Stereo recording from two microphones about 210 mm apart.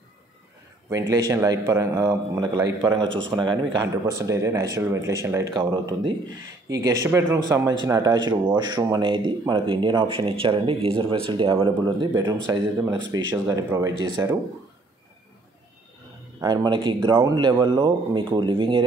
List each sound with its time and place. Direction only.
0.8 s speech: 15° right (ahead or behind)
16.3 s speech: 20° right (ahead or behind)